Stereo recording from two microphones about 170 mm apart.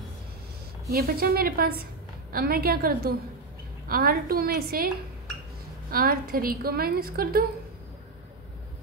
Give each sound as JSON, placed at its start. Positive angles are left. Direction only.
{"t": 0.9, "sound": "a woman's voice", "side_deg": -65}
{"t": 5.9, "sound": "a woman's voice", "side_deg": -60}